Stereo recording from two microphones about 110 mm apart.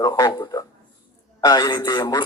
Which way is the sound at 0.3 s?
40° left (ahead or behind).